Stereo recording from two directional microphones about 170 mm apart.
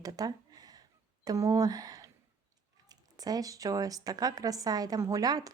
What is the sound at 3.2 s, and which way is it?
Speech, 20° right (ahead or behind).